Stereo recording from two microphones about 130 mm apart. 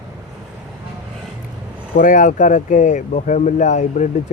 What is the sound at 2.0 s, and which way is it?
Speech, 85° left.